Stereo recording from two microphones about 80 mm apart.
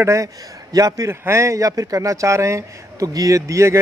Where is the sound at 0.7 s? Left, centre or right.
Right.